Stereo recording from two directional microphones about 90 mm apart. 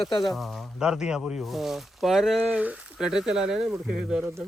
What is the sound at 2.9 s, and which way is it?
Speech, 5° right (ahead or behind).